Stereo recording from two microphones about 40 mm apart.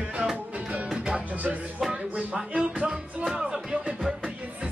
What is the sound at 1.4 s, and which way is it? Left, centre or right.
Music, right.